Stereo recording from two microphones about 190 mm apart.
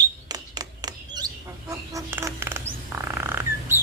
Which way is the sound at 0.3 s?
20° right (ahead or behind).